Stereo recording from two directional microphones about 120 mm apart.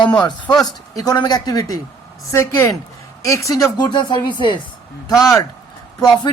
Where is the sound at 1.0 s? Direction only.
35° left (ahead or behind).